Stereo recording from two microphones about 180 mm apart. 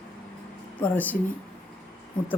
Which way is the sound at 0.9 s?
10° left (ahead or behind).